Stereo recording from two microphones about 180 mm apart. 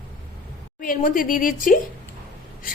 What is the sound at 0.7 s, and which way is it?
Speech, 50° left (ahead or behind).